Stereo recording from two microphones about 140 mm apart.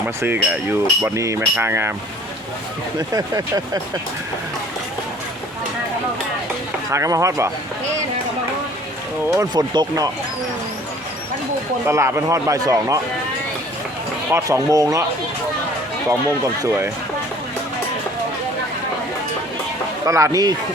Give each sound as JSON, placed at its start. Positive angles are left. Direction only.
{"t": 0.2, "sound": "speech", "side_deg": -15}
{"t": 3.1, "sound": "a man's voice", "side_deg": -25}
{"t": 6.9, "sound": "a man's voice", "side_deg": -20}
{"t": 9.3, "sound": "a man's voice", "side_deg": -25}
{"t": 11.9, "sound": "a man's voice", "side_deg": -20}
{"t": 14.3, "sound": "a man's voice", "side_deg": -20}
{"t": 16.6, "sound": "a man's voice", "side_deg": -20}
{"t": 20.1, "sound": "a man's voice", "side_deg": -25}